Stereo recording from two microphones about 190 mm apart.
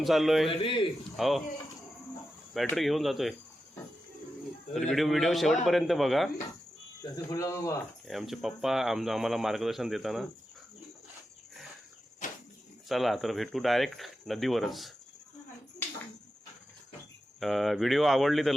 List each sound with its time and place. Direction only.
0.0 s speech: centre (ahead or behind)
0.4 s speech: 25° left (ahead or behind)
1.1 s speech: centre (ahead or behind)
2.5 s speech: centre (ahead or behind)
4.7 s speech: centre (ahead or behind)
7.0 s speech: 15° left (ahead or behind)
8.0 s speech: centre (ahead or behind)
12.9 s speech: centre (ahead or behind)
17.4 s speech: centre (ahead or behind)